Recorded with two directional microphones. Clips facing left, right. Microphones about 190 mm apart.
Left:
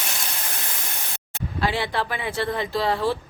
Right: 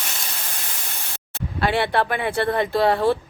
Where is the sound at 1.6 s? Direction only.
60° right (ahead or behind).